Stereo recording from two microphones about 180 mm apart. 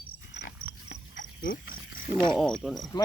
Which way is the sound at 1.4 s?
55° left (ahead or behind).